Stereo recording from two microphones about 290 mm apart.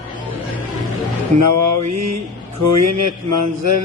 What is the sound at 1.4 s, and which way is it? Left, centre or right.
Mantra, right.